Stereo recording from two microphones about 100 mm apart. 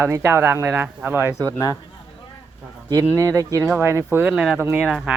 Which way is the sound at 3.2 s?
30° right (ahead or behind).